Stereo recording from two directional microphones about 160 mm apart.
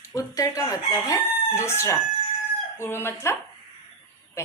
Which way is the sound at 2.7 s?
15° left (ahead or behind).